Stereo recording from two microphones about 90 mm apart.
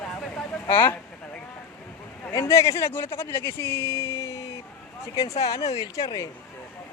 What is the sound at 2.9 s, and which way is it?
Speech, 25° left (ahead or behind).